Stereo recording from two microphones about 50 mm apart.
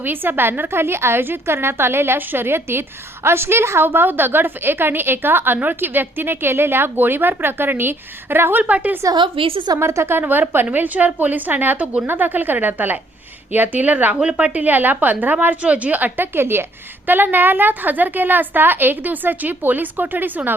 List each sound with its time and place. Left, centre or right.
0.0 s a woman's voice: right
3.8 s a woman's voice: right
9.7 s a woman's voice: right
10.2 s a woman's voice: right
10.7 s a woman's voice: right